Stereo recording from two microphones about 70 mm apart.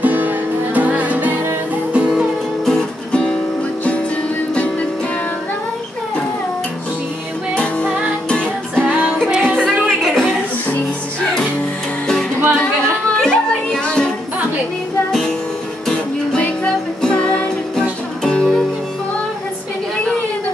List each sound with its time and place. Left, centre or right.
0.0 s music: right
2.0 s music: centre
2.6 s music: centre
7.5 s music: centre
8.8 s music: right
9.3 s music: centre
9.8 s music: centre
12.4 s music: right
13.1 s music: centre
15.0 s music: centre
18.2 s music: centre